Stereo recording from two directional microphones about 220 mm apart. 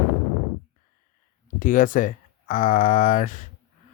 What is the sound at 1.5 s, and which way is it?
Speech, 35° left (ahead or behind).